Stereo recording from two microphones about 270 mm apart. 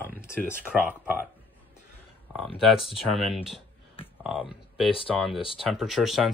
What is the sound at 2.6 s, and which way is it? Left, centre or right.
Speech, centre.